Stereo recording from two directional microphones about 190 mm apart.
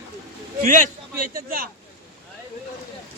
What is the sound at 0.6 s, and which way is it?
A man's voice, 45° right (ahead or behind).